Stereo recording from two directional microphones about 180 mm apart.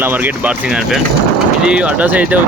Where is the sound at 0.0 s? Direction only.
10° right (ahead or behind).